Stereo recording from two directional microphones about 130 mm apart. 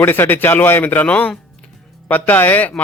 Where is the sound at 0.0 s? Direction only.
15° left (ahead or behind).